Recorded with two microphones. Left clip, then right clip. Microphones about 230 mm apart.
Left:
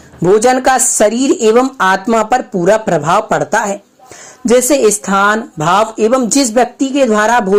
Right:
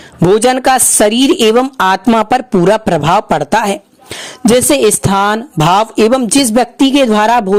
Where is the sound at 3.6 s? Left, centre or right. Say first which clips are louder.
Right 2 dB; right.